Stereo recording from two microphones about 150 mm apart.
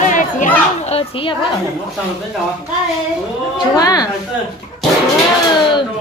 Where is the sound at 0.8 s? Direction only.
40° left (ahead or behind).